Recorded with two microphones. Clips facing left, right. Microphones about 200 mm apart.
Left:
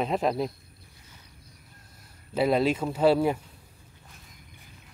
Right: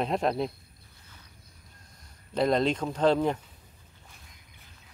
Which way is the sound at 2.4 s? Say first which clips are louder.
Left 1 dB; 5° left (ahead or behind).